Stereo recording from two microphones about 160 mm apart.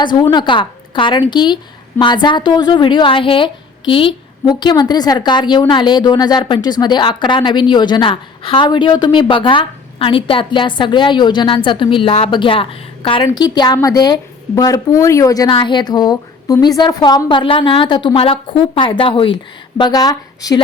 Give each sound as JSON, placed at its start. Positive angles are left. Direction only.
{"t": 0.2, "sound": "a woman's voice", "side_deg": 30}